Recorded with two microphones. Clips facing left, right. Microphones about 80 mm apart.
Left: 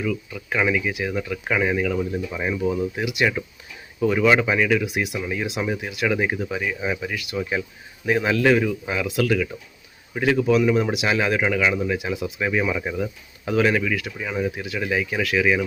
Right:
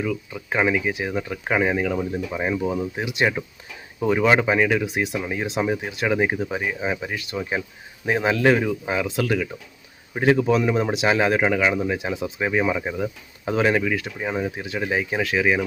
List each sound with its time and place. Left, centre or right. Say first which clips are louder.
0.0 s a man's voice: even; right